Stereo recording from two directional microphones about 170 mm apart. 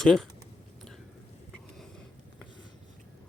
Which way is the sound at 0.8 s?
5° left (ahead or behind).